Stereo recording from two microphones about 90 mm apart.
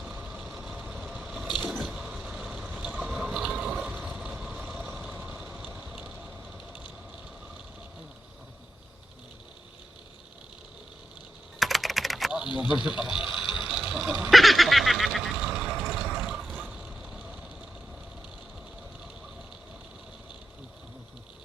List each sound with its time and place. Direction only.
0.0 s vehicle: 10° right (ahead or behind)
3.1 s water: 5° right (ahead or behind)
3.9 s vehicle: 20° right (ahead or behind)
4.2 s vehicle: 10° right (ahead or behind)
11.6 s typing: centre (ahead or behind)
12.5 s speech: 5° right (ahead or behind)
13.4 s a sound: 5° right (ahead or behind)